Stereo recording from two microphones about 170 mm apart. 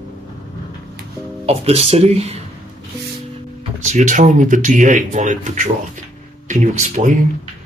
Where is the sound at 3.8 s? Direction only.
45° right (ahead or behind).